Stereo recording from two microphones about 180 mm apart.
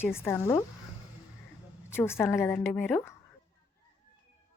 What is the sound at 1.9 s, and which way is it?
A woman's voice, 15° left (ahead or behind).